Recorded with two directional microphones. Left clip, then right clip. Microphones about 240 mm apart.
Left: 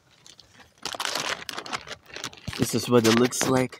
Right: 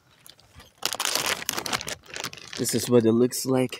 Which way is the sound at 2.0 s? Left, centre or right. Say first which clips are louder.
Right 2 dB; centre.